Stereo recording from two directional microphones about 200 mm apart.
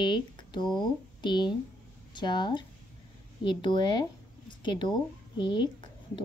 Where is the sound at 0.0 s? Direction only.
20° left (ahead or behind).